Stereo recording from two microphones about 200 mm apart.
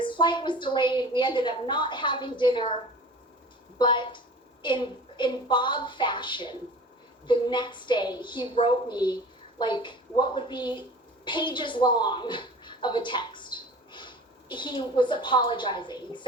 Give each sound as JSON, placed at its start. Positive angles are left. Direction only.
{"t": 0.0, "sound": "a woman's voice", "side_deg": 25}
{"t": 3.8, "sound": "a woman's voice", "side_deg": 25}